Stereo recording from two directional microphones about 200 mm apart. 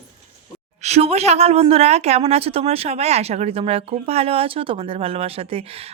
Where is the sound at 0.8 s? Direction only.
30° right (ahead or behind).